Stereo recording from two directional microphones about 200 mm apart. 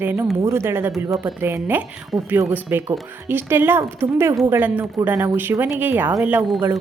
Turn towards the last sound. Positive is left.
turn(degrees=-5)  # may be behind; listen again after turning